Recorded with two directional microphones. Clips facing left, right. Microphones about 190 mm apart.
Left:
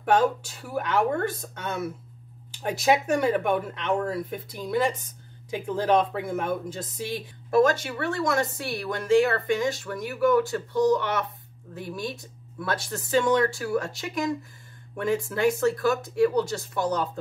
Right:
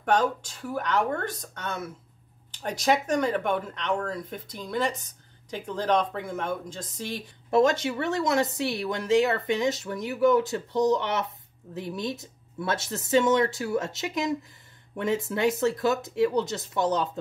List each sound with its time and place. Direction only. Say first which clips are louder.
0.0 s speech: left 2 dB; 10° left (ahead or behind)
7.5 s speech: left 1 dB; 20° right (ahead or behind)